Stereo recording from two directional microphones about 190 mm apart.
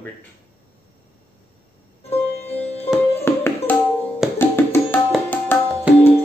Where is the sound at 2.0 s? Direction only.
35° left (ahead or behind).